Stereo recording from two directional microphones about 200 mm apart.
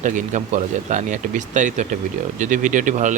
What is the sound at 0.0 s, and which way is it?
Speech, 40° right (ahead or behind).